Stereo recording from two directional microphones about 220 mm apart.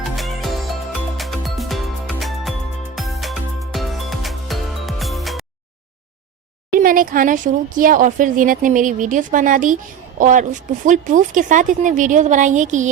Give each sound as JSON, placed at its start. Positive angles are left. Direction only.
{"t": 0.0, "sound": "music", "side_deg": 0}
{"t": 6.7, "sound": "speech", "side_deg": -40}